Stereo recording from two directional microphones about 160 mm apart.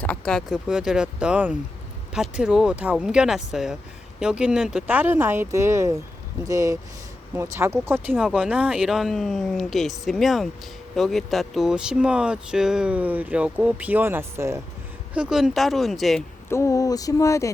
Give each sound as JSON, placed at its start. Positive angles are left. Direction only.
{"t": 0.0, "sound": "speech", "side_deg": 5}
{"t": 15.1, "sound": "speech", "side_deg": -5}
{"t": 16.5, "sound": "a sound", "side_deg": 20}